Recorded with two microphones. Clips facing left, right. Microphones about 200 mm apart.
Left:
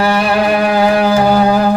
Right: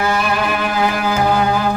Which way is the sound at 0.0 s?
35° left (ahead or behind).